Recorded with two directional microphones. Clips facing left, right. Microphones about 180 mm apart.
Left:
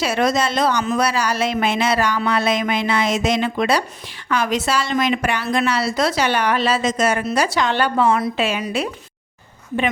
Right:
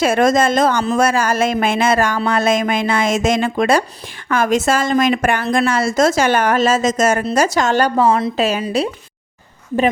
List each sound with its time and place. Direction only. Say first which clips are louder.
0.0 s a woman's voice: right 5 dB; 50° right (ahead or behind); by 8.9 s 30° right (ahead or behind)